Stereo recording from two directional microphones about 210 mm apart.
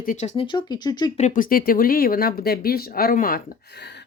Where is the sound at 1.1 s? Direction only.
35° left (ahead or behind).